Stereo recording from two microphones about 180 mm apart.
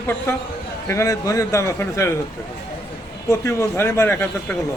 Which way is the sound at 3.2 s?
15° left (ahead or behind).